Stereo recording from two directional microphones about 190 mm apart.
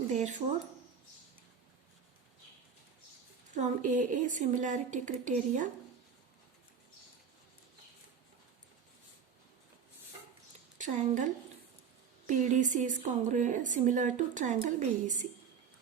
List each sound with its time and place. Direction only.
0.1 s a woman's voice: 40° right (ahead or behind)
3.5 s a woman's voice: 40° right (ahead or behind)
10.8 s a woman's voice: 40° right (ahead or behind)